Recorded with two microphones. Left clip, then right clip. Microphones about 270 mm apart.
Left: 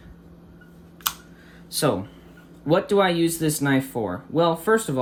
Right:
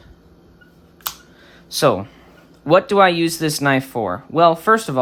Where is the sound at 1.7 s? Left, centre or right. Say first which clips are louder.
Right 7 dB; centre.